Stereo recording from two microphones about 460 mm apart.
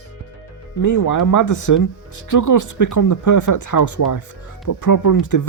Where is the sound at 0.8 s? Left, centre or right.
Left.